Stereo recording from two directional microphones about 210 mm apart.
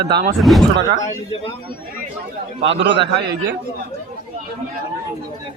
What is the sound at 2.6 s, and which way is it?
Speech, 60° right (ahead or behind).